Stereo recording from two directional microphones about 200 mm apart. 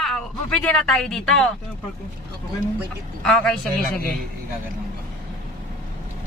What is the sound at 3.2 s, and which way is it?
Speech, 5° left (ahead or behind).